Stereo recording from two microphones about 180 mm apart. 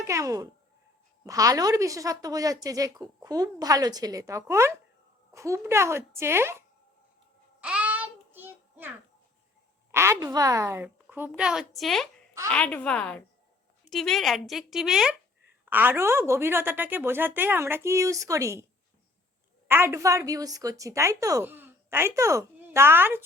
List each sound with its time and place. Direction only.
0.0 s a woman's voice: 15° right (ahead or behind)
7.6 s child singing: 5° right (ahead or behind)
9.9 s a woman's voice: 15° right (ahead or behind)
19.6 s a woman's voice: 10° right (ahead or behind)